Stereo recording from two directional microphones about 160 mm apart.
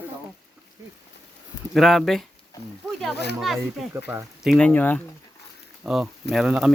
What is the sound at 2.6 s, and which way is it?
Speech, 90° left.